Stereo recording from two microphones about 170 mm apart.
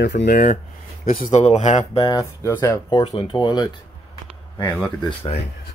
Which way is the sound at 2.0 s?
20° left (ahead or behind).